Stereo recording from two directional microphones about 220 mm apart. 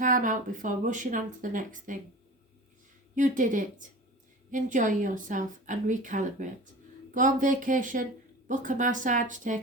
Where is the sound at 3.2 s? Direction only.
35° right (ahead or behind).